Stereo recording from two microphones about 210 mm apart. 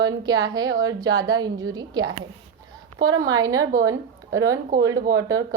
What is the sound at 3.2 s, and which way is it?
A woman's voice, 20° right (ahead or behind).